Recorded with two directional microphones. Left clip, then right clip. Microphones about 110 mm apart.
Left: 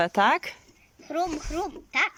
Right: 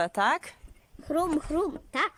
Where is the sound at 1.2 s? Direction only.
45° right (ahead or behind).